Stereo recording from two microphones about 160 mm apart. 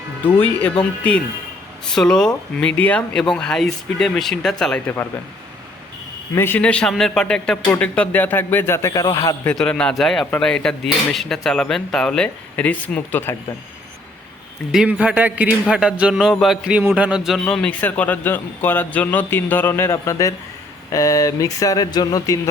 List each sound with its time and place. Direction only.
0.3 s a man's voice: 10° left (ahead or behind)
1.9 s a man's voice: 5° left (ahead or behind)
6.3 s a man's voice: 15° left (ahead or behind)
14.7 s a man's voice: 5° right (ahead or behind); by 22.4 s 25° left (ahead or behind)